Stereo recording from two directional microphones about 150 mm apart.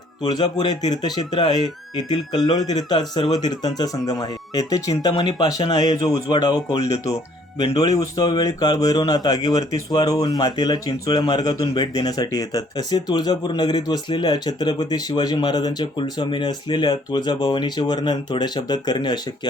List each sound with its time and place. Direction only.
0.2 s speech: 25° left (ahead or behind)
6.7 s speech: 45° left (ahead or behind)
7.6 s speech: 30° left (ahead or behind)